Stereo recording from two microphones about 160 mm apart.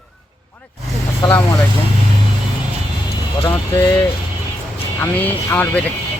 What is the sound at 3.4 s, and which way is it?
Speech, 15° left (ahead or behind).